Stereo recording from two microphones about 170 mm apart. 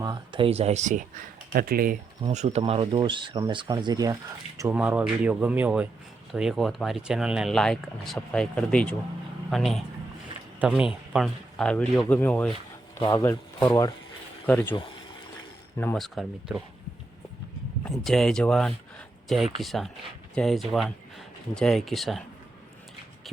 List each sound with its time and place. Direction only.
0.0 s speech: 25° right (ahead or behind); by 1.0 s 45° right (ahead or behind)
1.5 s speech: 60° right (ahead or behind)
2.2 s speech: 40° right (ahead or behind); by 4.7 s 20° right (ahead or behind)
4.7 s speech: 10° right (ahead or behind); by 12.5 s 10° left (ahead or behind)
13.0 s speech: 20° left (ahead or behind)
14.4 s speech: 10° left (ahead or behind)
15.8 s speech: 5° left (ahead or behind)
17.8 s speech: centre (ahead or behind)